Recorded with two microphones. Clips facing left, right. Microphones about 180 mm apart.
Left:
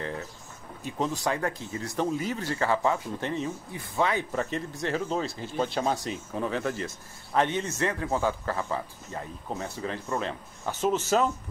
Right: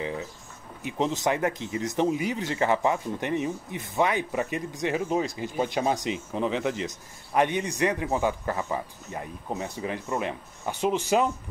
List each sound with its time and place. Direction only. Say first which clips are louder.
0.0 s speech: right 3 dB; 15° right (ahead or behind)